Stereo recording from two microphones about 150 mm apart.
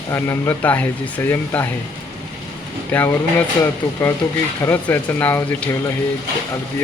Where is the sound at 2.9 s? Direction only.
10° left (ahead or behind).